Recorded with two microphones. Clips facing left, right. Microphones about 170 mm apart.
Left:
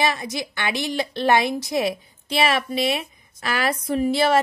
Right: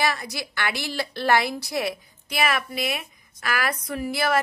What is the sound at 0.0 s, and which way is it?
A woman's voice, 20° left (ahead or behind).